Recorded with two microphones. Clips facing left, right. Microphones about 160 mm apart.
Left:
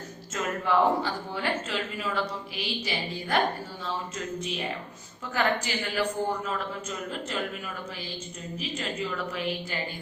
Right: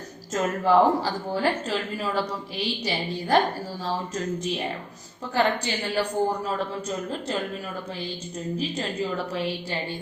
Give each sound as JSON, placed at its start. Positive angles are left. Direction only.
{"t": 0.3, "sound": "a woman's voice", "side_deg": -35}
{"t": 5.3, "sound": "a woman's voice", "side_deg": -35}
{"t": 8.5, "sound": "a woman's voice", "side_deg": -35}